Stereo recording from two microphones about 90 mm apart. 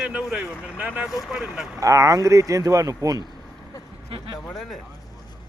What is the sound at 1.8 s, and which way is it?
Speech, 35° right (ahead or behind).